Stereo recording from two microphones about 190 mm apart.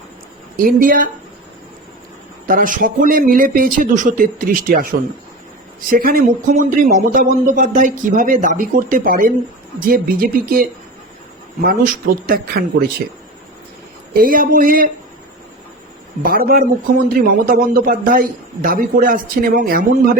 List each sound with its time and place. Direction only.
0.5 s speech: 45° right (ahead or behind)
2.5 s speech: 45° right (ahead or behind)
14.2 s speech: 50° right (ahead or behind)
16.2 s speech: 50° right (ahead or behind)